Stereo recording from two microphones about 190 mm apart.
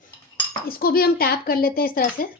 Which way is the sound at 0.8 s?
50° left (ahead or behind).